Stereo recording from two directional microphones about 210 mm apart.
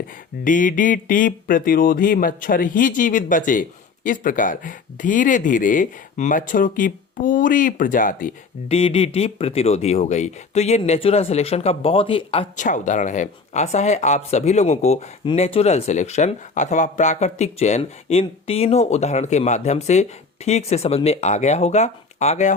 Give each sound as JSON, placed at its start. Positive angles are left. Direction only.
{"t": 0.4, "sound": "speech", "side_deg": 40}